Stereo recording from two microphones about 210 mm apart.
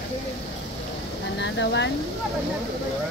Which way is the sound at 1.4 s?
55° left (ahead or behind).